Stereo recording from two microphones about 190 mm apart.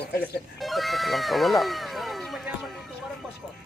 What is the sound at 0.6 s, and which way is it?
Speech, centre (ahead or behind).